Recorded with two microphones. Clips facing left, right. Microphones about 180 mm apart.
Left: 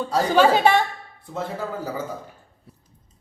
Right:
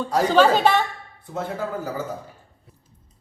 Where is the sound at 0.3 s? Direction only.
10° left (ahead or behind).